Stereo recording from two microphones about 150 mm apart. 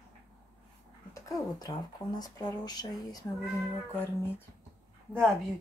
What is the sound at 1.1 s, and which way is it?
Speech, 25° left (ahead or behind).